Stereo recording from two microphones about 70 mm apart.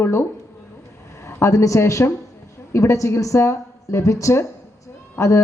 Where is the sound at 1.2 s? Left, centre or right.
Left.